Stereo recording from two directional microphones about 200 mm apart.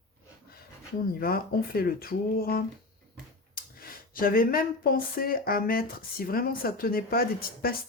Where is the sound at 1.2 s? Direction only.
50° left (ahead or behind).